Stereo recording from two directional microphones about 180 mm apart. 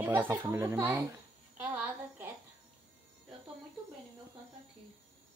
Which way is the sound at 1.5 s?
10° right (ahead or behind).